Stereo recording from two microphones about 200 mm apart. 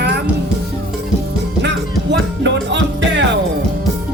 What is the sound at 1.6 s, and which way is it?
Music, 60° right (ahead or behind).